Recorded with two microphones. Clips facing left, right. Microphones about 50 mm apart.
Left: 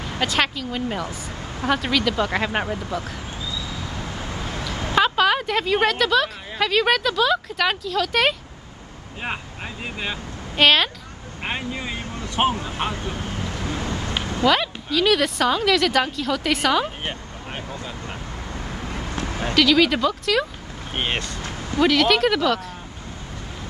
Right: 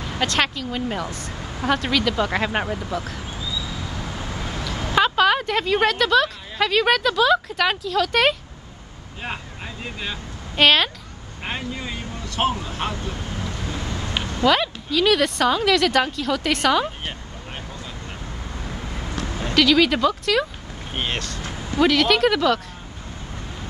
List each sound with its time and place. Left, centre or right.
0.0 s speech: centre
3.6 s a sound: centre
10.5 s a woman's voice: centre
11.4 s vehicle: centre
12.5 s speech: left
12.9 s vehicle: left
14.4 s speech: centre
19.2 s a sound: left
19.5 s speech: centre
20.9 s speech: centre
21.4 s speech: centre